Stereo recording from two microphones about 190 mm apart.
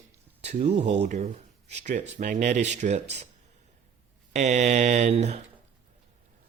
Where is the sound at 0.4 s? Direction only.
40° right (ahead or behind).